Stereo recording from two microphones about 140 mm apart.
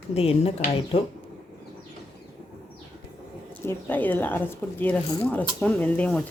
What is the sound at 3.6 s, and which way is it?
Speech, 15° left (ahead or behind).